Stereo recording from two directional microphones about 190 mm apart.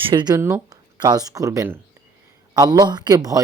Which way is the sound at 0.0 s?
25° right (ahead or behind).